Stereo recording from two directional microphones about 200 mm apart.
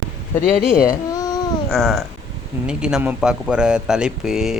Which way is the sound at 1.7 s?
Centre (ahead or behind).